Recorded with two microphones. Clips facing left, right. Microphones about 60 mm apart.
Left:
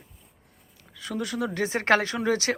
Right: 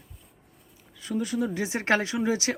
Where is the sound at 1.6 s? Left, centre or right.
Left.